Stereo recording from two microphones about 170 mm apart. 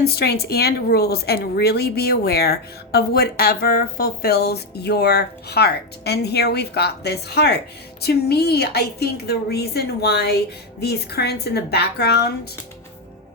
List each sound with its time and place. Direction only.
0.0 s a woman's voice: 70° left (ahead or behind)